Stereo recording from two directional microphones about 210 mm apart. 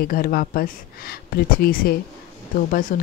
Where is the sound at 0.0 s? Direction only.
45° left (ahead or behind).